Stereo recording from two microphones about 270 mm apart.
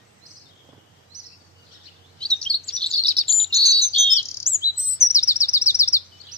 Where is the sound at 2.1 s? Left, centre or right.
Centre.